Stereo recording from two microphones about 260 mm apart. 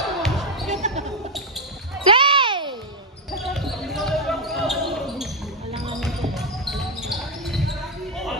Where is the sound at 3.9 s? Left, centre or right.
Centre.